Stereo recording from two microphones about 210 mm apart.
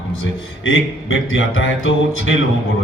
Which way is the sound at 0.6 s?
65° left (ahead or behind).